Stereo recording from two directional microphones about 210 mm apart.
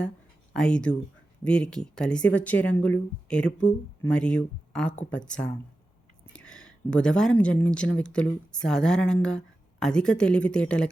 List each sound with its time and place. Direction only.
0.5 s speech: 5° left (ahead or behind)